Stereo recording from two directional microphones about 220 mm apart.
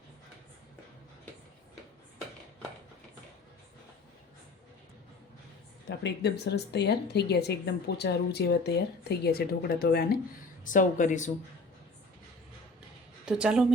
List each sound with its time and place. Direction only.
5.9 s a woman's voice: 50° left (ahead or behind); by 11.3 s 35° left (ahead or behind)
13.2 s a woman's voice: 5° right (ahead or behind)